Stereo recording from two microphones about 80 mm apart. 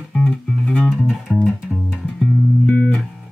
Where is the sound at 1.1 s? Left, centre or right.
Centre.